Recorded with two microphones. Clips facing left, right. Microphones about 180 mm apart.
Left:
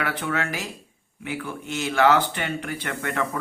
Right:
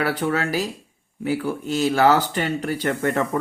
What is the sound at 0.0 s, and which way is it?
Speech, 40° right (ahead or behind).